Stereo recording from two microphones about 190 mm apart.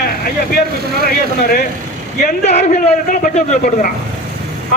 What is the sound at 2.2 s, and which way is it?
A man's voice, 35° left (ahead or behind).